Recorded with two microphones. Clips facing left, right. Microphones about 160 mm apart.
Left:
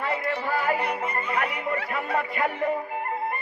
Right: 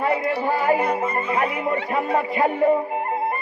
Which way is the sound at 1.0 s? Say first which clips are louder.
Right 5 dB; 30° right (ahead or behind).